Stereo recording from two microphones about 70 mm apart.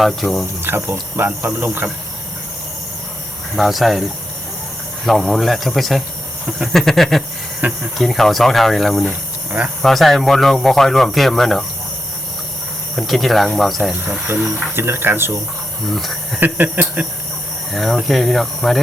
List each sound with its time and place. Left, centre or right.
0.0 s speech: centre
0.6 s speech: right
3.5 s speech: centre
5.0 s speech: centre
7.6 s a sound: right
7.9 s speech: centre
13.0 s speech: centre
14.8 s speech: right
15.9 s speech: centre
16.4 s a sound: right
17.7 s speech: centre